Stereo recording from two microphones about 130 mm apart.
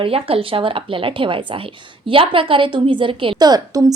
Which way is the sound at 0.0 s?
45° right (ahead or behind).